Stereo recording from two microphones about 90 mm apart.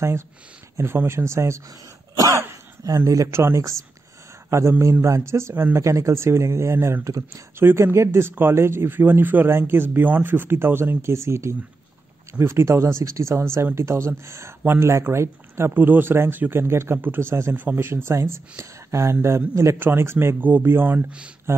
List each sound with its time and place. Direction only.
0.7 s speech: 30° right (ahead or behind)
2.1 s cough: 40° right (ahead or behind)
3.1 s speech: 35° right (ahead or behind)